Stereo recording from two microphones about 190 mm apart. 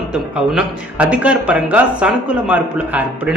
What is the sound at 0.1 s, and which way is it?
Speech, 5° right (ahead or behind).